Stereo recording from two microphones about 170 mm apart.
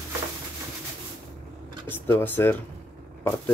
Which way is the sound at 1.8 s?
15° left (ahead or behind).